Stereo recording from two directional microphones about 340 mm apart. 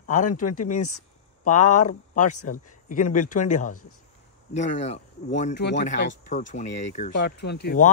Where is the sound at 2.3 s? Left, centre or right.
Left.